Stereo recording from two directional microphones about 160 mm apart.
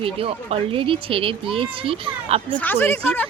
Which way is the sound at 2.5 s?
10° left (ahead or behind).